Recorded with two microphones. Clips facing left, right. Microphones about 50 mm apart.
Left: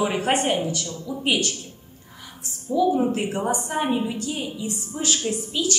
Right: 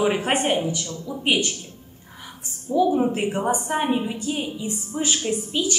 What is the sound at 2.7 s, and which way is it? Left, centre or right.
A woman's voice, centre.